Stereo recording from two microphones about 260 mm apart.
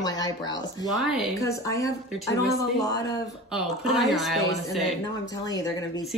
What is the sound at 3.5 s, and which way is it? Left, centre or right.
Speech, centre.